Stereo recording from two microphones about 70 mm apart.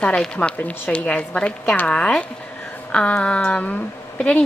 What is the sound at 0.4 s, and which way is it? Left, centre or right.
A woman's voice, left.